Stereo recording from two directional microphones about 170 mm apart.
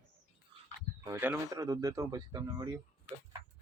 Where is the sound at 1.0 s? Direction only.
15° right (ahead or behind).